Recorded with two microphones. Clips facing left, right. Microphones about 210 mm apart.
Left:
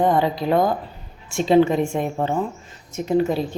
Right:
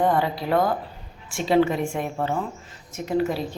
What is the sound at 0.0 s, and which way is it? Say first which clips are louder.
Speech: left 3 dB; 20° left (ahead or behind).